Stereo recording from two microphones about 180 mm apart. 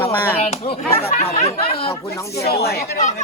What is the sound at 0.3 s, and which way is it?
Speech, 35° left (ahead or behind).